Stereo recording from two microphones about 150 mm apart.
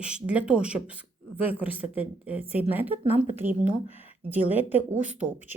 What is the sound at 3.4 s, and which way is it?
Speech, 60° right (ahead or behind).